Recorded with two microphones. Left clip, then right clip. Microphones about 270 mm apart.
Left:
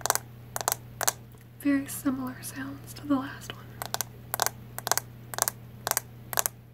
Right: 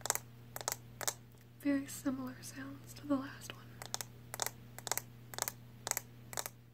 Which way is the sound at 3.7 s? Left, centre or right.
Centre.